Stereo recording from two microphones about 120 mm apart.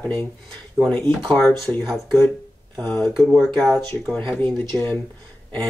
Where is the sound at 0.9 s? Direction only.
10° left (ahead or behind).